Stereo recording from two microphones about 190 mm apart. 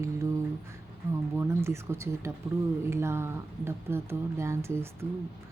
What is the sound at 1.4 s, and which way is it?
Speech, 15° right (ahead or behind).